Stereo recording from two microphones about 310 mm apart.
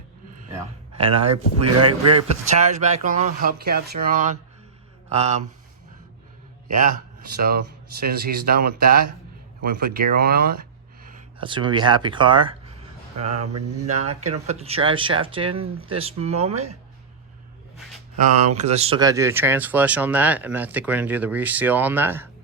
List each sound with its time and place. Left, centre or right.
0.9 s speech: centre
7.3 s speech: right
11.3 s speech: centre
13.9 s speech: right
14.3 s speech: right
17.7 s a sound: centre
18.3 s speech: right